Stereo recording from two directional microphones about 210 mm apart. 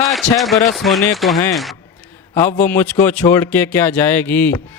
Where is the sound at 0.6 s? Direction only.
Centre (ahead or behind).